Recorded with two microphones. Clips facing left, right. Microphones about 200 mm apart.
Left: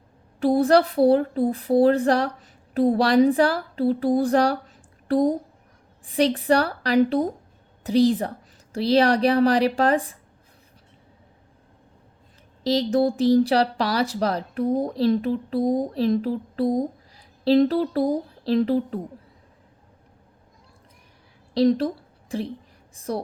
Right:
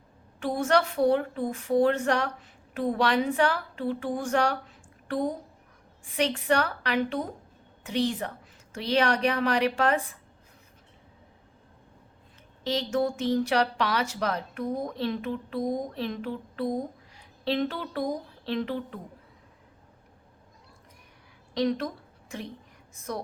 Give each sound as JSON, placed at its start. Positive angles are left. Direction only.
{"t": 0.3, "sound": "speech", "side_deg": 35}
{"t": 12.6, "sound": "speech", "side_deg": 35}
{"t": 21.5, "sound": "a woman's voice", "side_deg": 35}